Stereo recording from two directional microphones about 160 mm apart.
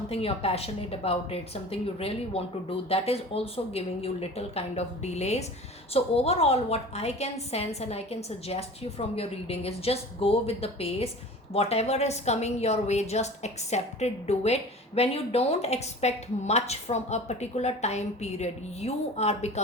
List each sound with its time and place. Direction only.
0.1 s a woman's voice: 35° left (ahead or behind)